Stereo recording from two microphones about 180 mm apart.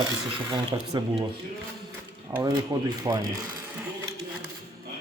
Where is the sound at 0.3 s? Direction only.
25° right (ahead or behind).